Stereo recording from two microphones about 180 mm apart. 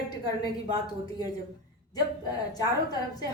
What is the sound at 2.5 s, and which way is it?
Speech, 20° left (ahead or behind).